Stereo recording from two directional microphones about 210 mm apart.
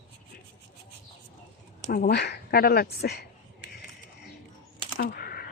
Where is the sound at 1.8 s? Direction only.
50° left (ahead or behind).